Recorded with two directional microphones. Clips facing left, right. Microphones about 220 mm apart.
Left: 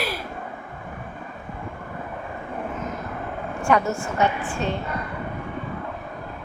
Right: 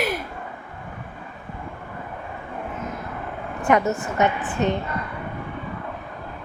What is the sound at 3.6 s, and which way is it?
A woman's voice, 20° right (ahead or behind).